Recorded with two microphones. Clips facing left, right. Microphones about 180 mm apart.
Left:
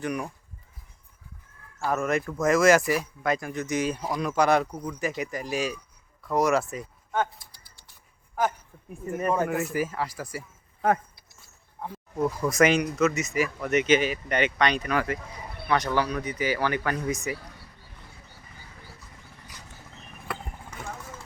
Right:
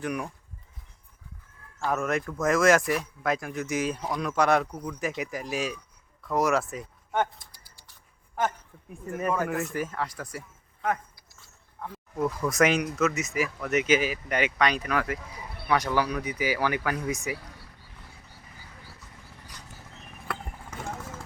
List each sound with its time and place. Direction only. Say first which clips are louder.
0.0 s speech: left 1 dB; centre (ahead or behind)
1.8 s speech: left 1 dB; centre (ahead or behind)
7.1 s a sound: even; 20° right (ahead or behind)
8.4 s speech: left 2 dB; 5° left (ahead or behind)
10.8 s a sound: left 5 dB; 40° left (ahead or behind)
12.3 s speech: left 2 dB; centre (ahead or behind)
20.3 s vehicle: even; centre (ahead or behind)